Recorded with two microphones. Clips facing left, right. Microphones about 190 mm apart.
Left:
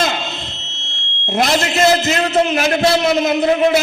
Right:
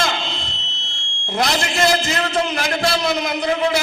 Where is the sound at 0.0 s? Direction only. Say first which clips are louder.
Left 3 dB; 20° left (ahead or behind).